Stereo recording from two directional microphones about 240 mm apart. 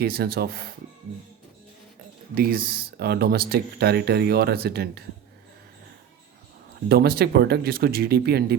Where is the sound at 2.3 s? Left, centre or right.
Right.